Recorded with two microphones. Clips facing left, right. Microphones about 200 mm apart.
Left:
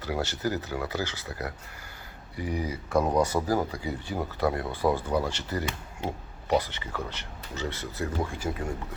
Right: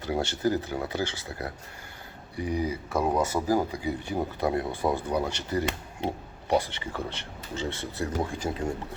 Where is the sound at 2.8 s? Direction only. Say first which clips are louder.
Left 4 dB; 25° right (ahead or behind).